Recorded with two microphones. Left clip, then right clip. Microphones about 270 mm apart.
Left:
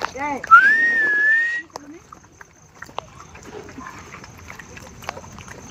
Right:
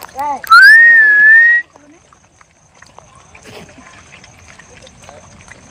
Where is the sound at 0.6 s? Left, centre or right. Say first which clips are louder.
Right 12 dB; right.